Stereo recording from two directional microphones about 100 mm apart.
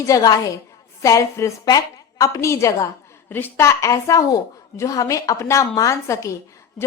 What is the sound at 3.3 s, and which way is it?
A woman's voice, 20° left (ahead or behind).